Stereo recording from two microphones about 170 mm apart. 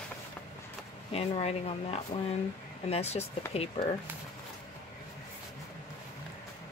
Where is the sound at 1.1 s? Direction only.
35° left (ahead or behind).